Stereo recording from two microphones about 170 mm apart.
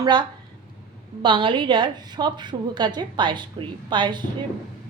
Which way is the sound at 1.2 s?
30° right (ahead or behind).